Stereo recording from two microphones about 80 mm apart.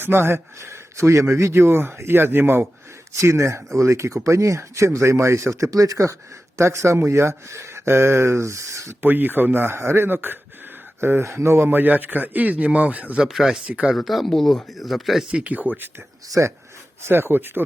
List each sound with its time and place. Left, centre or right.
0.0 s speech: right
3.2 s speech: right
9.0 s a man's voice: right
13.2 s speech: centre
13.7 s speech: centre
13.9 s speech: centre; by 15.9 s right
16.4 s a man's voice: right